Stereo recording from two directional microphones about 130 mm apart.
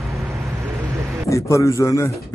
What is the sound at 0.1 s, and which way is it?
Vehicle, 25° right (ahead or behind).